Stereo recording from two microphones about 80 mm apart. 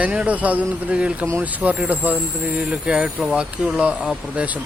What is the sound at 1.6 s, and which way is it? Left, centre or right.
Speech, right.